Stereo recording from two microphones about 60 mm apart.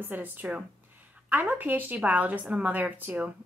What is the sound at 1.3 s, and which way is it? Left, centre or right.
A woman's voice, right.